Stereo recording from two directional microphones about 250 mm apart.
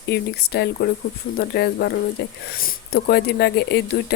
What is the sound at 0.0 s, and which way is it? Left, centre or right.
Speech, left.